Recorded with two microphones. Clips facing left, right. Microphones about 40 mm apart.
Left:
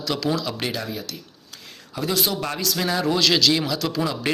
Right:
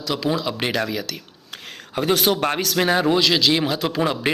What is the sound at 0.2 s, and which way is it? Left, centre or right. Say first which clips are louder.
Speech: right 2 dB; right.